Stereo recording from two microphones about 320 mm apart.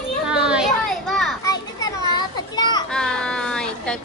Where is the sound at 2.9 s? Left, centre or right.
Centre.